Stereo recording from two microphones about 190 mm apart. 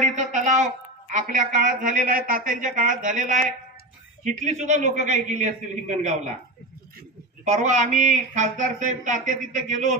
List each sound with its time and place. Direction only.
0.1 s a woman's voice: 40° right (ahead or behind)
7.4 s speech: 40° right (ahead or behind)